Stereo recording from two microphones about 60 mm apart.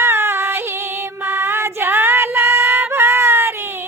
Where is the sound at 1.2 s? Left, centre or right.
Right.